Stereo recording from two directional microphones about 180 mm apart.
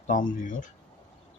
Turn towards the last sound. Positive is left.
turn(degrees=45)  # may be behind; listen again after turning